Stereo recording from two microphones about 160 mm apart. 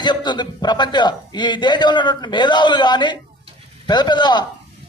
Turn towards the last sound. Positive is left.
turn(degrees=25)  # may be behind; listen again after turning